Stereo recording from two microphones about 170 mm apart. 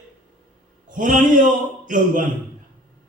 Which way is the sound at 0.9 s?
50° right (ahead or behind).